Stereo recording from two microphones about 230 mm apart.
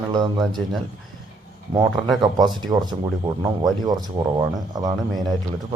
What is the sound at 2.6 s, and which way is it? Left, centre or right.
Speech, centre.